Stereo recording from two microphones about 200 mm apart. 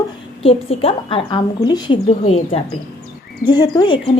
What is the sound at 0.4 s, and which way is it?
A woman's voice, 30° left (ahead or behind).